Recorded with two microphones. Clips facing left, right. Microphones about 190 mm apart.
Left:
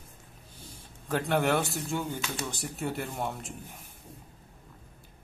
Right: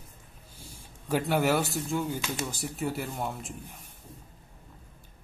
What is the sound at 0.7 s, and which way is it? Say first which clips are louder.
A man's voice: right 2 dB; 10° right (ahead or behind).